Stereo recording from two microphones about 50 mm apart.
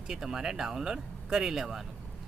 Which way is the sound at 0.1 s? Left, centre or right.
Centre.